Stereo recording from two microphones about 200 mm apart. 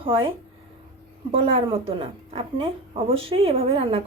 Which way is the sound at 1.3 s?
25° right (ahead or behind).